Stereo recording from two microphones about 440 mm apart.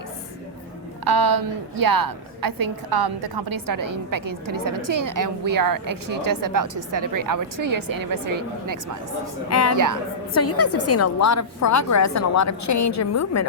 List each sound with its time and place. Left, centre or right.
1.0 s a woman's voice: right
9.5 s a woman's voice: left
9.7 s a woman's voice: right
10.3 s a woman's voice: left